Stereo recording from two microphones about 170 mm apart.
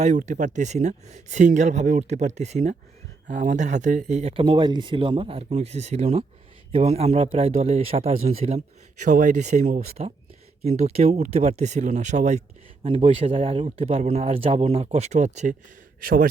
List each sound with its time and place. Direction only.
0.0 s speech: 45° right (ahead or behind)
9.0 s speech: 50° right (ahead or behind)
16.0 s a man's voice: 55° right (ahead or behind)